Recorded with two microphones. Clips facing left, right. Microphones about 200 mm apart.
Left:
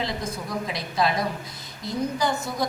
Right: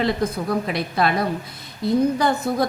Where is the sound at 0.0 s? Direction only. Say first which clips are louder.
Right 8 dB; 60° right (ahead or behind).